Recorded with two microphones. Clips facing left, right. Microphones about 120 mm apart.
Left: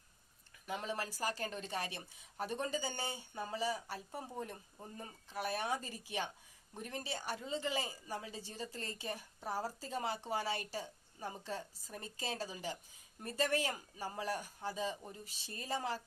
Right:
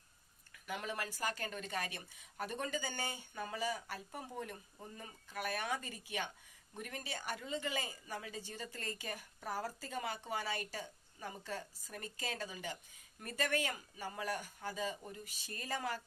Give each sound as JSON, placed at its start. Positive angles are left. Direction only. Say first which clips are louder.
{"t": 0.7, "sound": "a woman's voice", "louder": "left 1 dB", "side_deg": 30}